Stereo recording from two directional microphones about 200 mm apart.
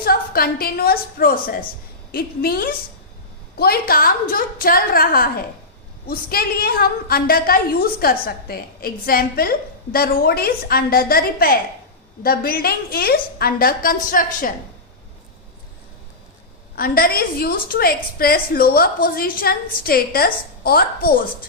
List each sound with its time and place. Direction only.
0.0 s a woman's voice: 50° left (ahead or behind)
16.7 s a woman's voice: 50° left (ahead or behind)